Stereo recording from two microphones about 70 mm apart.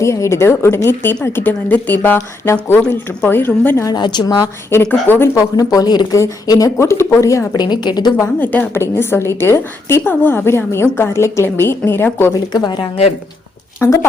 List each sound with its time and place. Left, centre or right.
0.0 s a woman's voice: left
3.8 s a woman's voice: left
4.9 s a woman's voice: left
5.4 s speech: left
6.1 s a woman's voice: left
6.8 s a woman's voice: left
7.5 s a woman's voice: left
8.4 s a woman's voice: left
8.7 s a woman's voice: left
12.5 s a woman's voice: left
13.8 s a woman's voice: left